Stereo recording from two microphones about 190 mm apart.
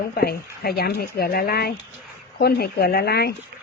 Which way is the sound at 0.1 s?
55° left (ahead or behind).